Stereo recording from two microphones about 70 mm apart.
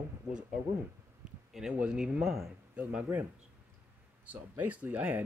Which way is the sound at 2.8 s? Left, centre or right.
Centre.